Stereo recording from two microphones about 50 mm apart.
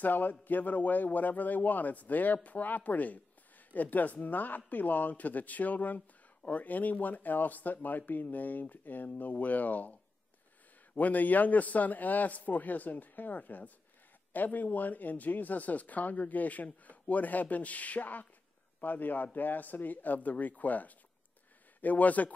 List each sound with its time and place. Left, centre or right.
0.0 s speech: left
11.0 s speech: left